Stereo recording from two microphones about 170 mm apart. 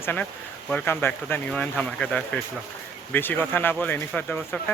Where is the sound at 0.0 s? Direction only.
10° left (ahead or behind).